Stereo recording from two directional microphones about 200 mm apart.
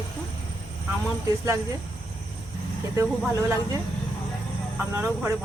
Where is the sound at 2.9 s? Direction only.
15° right (ahead or behind).